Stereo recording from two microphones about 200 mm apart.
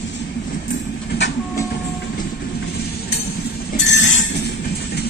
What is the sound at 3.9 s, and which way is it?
Train, 70° left (ahead or behind).